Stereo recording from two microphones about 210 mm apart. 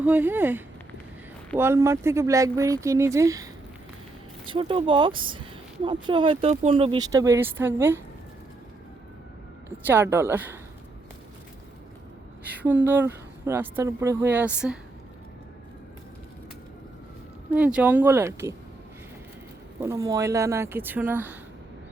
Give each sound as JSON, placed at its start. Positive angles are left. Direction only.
{"t": 0.0, "sound": "speech", "side_deg": -10}
{"t": 4.4, "sound": "speech", "side_deg": -25}
{"t": 9.7, "sound": "speech", "side_deg": -10}
{"t": 12.5, "sound": "speech", "side_deg": -10}
{"t": 17.5, "sound": "speech", "side_deg": -5}
{"t": 19.8, "sound": "speech", "side_deg": -15}